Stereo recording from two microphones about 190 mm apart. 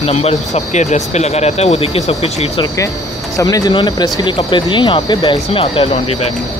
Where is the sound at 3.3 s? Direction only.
20° left (ahead or behind).